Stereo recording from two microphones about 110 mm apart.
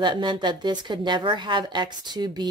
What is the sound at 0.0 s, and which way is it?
Speech, 45° right (ahead or behind).